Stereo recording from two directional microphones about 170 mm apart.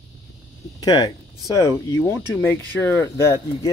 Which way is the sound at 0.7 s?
25° left (ahead or behind).